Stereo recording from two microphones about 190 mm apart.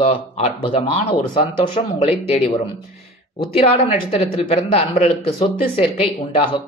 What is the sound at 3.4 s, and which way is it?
Speech, 30° left (ahead or behind).